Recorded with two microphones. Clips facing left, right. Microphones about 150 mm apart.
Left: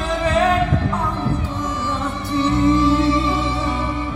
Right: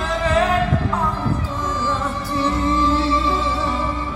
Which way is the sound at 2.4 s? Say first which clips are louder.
Left 4 dB; 20° left (ahead or behind).